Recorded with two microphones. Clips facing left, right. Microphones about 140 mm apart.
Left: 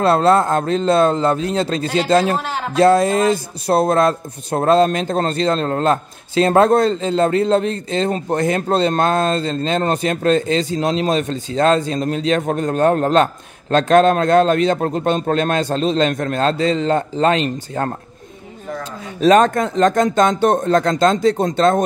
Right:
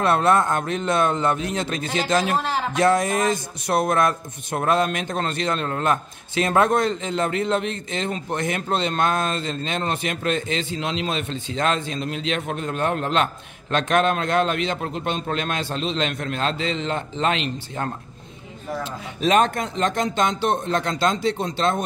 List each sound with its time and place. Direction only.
0.0 s a man's voice: 30° left (ahead or behind)
19.2 s speech: 40° left (ahead or behind)